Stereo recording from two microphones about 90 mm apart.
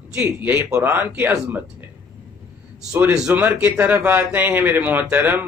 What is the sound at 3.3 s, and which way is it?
Speech, 20° right (ahead or behind).